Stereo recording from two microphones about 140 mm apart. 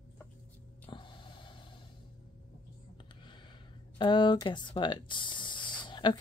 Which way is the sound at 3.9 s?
35° left (ahead or behind).